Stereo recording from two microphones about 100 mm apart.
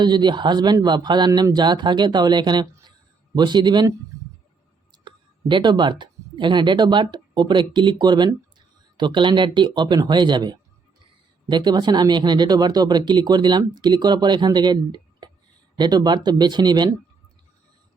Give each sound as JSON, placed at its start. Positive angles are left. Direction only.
{"t": 0.0, "sound": "speech", "side_deg": -45}
{"t": 4.9, "sound": "speech", "side_deg": -50}